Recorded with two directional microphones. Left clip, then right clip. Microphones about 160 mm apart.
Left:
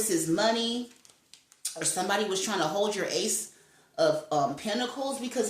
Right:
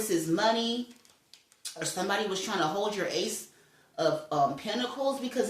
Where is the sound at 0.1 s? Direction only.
40° left (ahead or behind).